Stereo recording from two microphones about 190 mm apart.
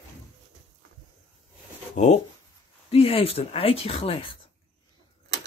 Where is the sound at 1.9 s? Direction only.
40° left (ahead or behind).